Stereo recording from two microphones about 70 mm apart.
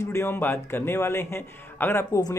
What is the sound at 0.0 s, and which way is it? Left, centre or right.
Speech, left.